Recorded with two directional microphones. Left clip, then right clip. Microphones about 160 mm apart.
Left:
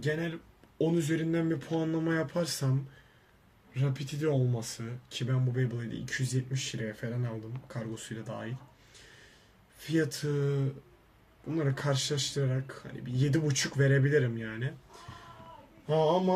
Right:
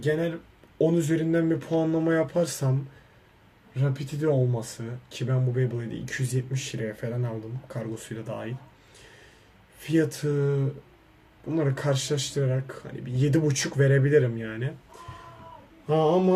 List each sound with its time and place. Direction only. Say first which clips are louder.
0.0 s speech: right 7 dB; centre (ahead or behind)
3.8 s speech: right 5 dB; centre (ahead or behind)
9.8 s speech: right 6 dB; centre (ahead or behind)
15.9 s a sound: right 4 dB; 20° right (ahead or behind)